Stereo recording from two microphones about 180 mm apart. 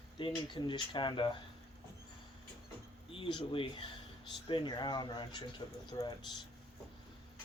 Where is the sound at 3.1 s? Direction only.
30° left (ahead or behind).